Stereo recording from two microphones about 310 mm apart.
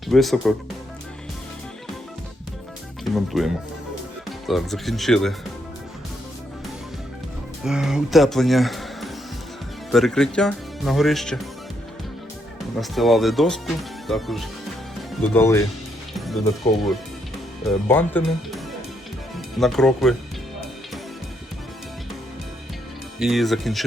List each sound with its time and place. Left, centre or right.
0.1 s speech: centre
3.0 s speech: centre
7.6 s speech: centre
12.8 s speech: centre
16.1 s music: centre
17.7 s speech: centre
23.2 s speech: centre